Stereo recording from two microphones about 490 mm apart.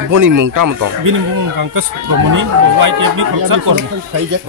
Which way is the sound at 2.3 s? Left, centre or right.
Right.